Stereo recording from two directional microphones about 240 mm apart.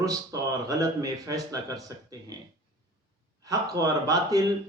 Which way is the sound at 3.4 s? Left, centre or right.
Centre.